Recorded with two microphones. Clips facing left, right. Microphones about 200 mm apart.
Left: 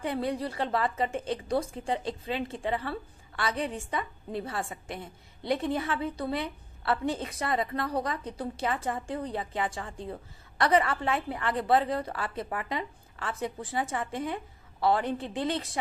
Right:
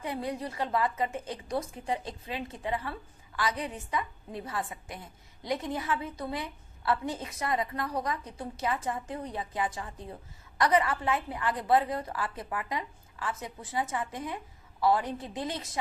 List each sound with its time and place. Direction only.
0.0 s a woman's voice: 30° left (ahead or behind)